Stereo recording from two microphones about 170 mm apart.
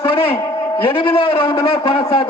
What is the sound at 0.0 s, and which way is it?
A man's voice, 30° left (ahead or behind).